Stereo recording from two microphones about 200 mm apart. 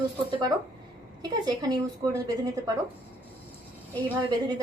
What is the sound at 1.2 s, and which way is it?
Speech, 20° right (ahead or behind).